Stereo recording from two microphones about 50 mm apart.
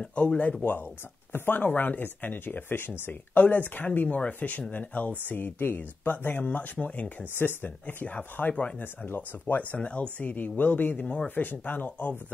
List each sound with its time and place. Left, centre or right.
0.0 s speech: left
3.3 s speech: left
7.3 s speech: left
7.8 s speech: left